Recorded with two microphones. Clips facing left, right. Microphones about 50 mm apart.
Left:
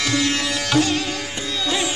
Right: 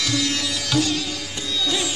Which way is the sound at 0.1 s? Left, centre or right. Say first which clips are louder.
Left 3 dB; left.